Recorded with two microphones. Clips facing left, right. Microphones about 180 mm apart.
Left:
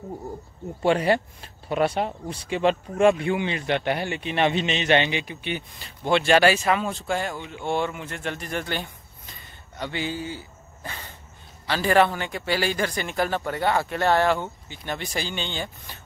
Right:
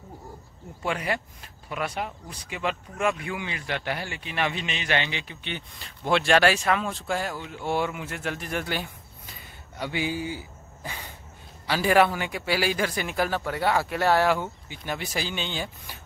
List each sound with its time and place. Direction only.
0.8 s a man's voice: 30° left (ahead or behind); by 16.0 s 5° right (ahead or behind)